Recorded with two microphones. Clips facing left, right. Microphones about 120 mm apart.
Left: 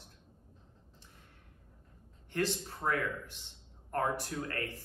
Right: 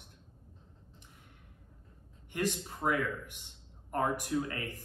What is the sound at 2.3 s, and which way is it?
Speech, 15° right (ahead or behind).